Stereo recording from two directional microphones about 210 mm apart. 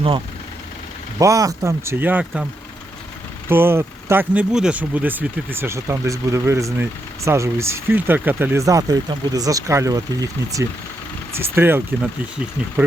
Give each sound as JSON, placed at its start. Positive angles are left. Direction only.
{"t": 1.2, "sound": "speech", "side_deg": -15}
{"t": 3.5, "sound": "speech", "side_deg": -10}